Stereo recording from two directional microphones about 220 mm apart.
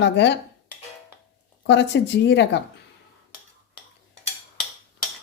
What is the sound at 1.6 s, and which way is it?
Speech, 55° left (ahead or behind).